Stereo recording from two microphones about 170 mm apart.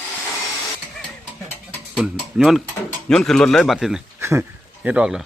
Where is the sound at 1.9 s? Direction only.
Centre (ahead or behind).